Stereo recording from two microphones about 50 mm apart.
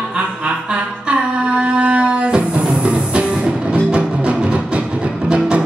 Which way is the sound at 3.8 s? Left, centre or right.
Right.